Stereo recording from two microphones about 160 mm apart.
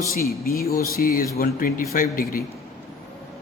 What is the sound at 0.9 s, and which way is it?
Speech, 65° left (ahead or behind).